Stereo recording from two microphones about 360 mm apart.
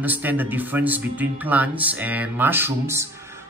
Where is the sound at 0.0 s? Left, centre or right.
Centre.